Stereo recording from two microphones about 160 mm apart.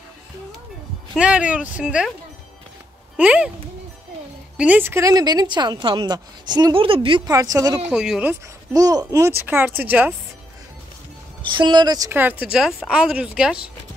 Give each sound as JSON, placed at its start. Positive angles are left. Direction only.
{"t": 1.1, "sound": "speech", "side_deg": -5}
{"t": 3.2, "sound": "speech", "side_deg": -10}
{"t": 4.6, "sound": "a woman's voice", "side_deg": -10}
{"t": 7.9, "sound": "speech", "side_deg": -5}
{"t": 8.7, "sound": "speech", "side_deg": -20}
{"t": 11.5, "sound": "a woman's voice", "side_deg": -30}
{"t": 12.1, "sound": "speech", "side_deg": -10}